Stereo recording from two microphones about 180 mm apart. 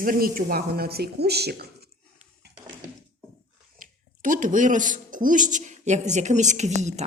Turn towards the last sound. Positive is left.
turn(degrees=-40)  # may be behind; listen again after turning